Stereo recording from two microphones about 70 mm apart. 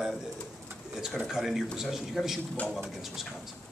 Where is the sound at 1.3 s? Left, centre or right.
Centre.